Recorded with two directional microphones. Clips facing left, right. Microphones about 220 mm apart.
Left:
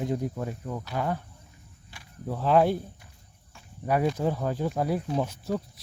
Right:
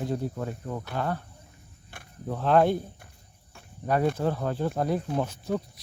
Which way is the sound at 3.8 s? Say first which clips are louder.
Even; 10° left (ahead or behind).